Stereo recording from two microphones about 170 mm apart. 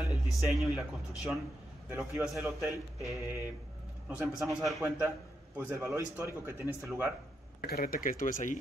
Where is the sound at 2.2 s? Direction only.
10° right (ahead or behind).